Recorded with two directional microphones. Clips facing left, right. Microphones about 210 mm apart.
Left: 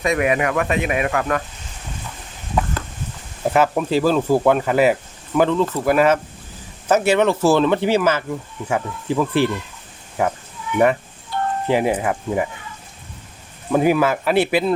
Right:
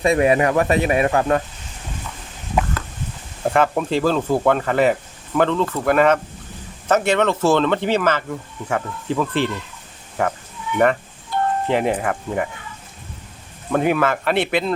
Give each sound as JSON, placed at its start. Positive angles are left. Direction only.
{"t": 0.0, "sound": "speech", "side_deg": -30}
{"t": 3.4, "sound": "speech", "side_deg": 5}
{"t": 11.7, "sound": "speech", "side_deg": 5}
{"t": 13.7, "sound": "speech", "side_deg": 5}